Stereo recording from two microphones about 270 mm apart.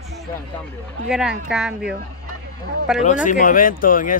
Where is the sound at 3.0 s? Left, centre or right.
Left.